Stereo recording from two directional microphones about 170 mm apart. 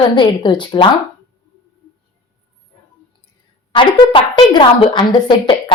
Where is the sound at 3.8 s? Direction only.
30° left (ahead or behind).